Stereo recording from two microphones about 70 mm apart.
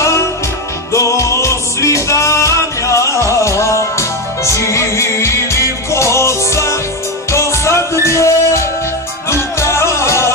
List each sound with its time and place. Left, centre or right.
0.9 s music: left